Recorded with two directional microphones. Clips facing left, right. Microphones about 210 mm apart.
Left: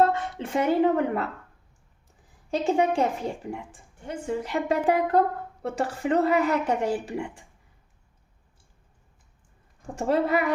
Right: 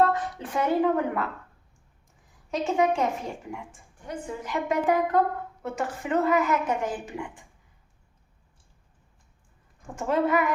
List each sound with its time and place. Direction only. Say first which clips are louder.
0.0 s speech: left 1 dB; 25° left (ahead or behind)
2.5 s a woman's voice: left 1 dB; 30° left (ahead or behind)
9.8 s a woman's voice: left 1 dB; 35° left (ahead or behind)